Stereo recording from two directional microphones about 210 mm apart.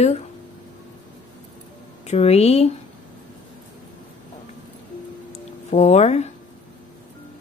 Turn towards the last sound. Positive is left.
turn(degrees=30)  # may be behind; listen again after turning